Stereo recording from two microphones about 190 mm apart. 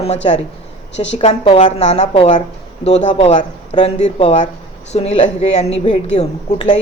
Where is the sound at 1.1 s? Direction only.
35° left (ahead or behind).